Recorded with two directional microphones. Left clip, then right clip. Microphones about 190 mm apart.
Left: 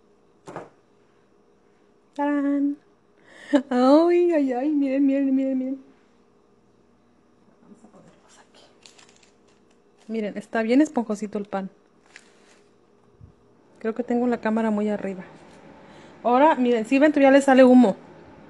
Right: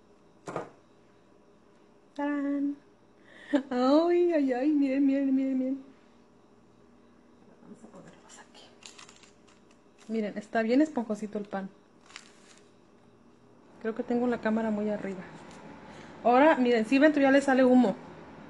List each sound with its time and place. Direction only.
2.1 s a woman's voice: 50° left (ahead or behind)
10.1 s speech: 50° left (ahead or behind)
13.7 s speech: 35° left (ahead or behind); by 15.2 s 50° left (ahead or behind)
16.2 s speech: 40° left (ahead or behind)